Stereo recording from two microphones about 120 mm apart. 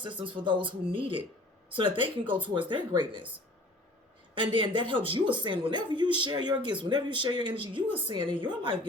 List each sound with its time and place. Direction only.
0.0 s speech: 45° right (ahead or behind)
4.4 s a woman's voice: 45° right (ahead or behind)